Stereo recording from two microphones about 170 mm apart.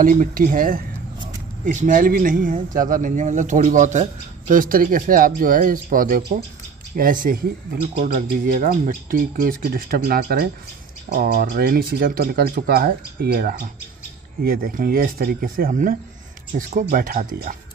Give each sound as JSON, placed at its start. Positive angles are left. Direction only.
{"t": 0.0, "sound": "speech", "side_deg": -50}